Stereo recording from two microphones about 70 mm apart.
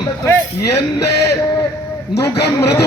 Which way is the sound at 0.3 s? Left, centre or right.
Left.